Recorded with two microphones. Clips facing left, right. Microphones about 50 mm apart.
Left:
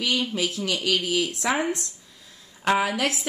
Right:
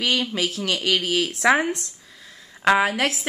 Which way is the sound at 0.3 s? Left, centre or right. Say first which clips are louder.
Right 2 dB; right.